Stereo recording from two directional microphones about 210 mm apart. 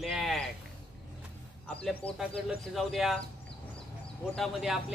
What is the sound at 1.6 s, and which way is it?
Speech, 5° left (ahead or behind).